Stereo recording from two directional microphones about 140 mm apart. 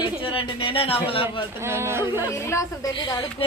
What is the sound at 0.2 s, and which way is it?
A man's voice, 40° left (ahead or behind).